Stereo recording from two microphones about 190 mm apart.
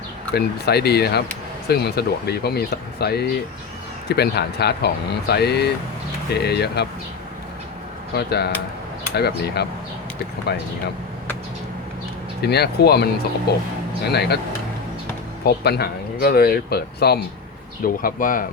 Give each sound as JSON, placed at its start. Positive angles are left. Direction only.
{"t": 0.3, "sound": "speech", "side_deg": 60}
{"t": 8.1, "sound": "speech", "side_deg": 60}
{"t": 12.4, "sound": "speech", "side_deg": 60}
{"t": 15.4, "sound": "speech", "side_deg": 60}